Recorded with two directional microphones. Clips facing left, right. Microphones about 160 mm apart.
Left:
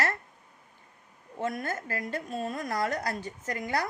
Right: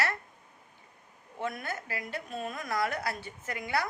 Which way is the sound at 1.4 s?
45° left (ahead or behind).